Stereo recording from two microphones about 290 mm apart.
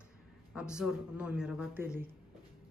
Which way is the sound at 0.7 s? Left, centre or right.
Centre.